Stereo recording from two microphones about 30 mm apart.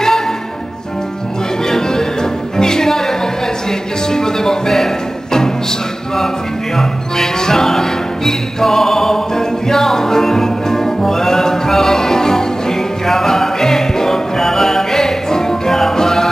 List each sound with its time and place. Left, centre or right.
1.7 s music: centre
6.8 s music: centre